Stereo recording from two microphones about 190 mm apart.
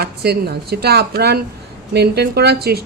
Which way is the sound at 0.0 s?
55° right (ahead or behind).